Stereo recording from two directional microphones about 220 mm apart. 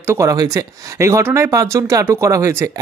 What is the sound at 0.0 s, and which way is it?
Speech, 15° right (ahead or behind).